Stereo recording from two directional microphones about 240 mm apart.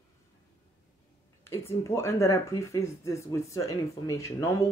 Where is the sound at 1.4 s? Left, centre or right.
Centre.